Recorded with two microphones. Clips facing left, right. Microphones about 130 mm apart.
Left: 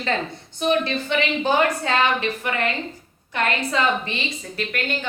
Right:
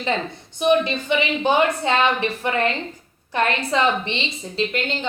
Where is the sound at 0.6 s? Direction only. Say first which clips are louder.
Right 3 dB; 15° right (ahead or behind).